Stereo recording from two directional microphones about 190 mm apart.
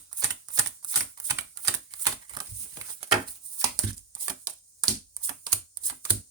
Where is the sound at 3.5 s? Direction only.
20° right (ahead or behind).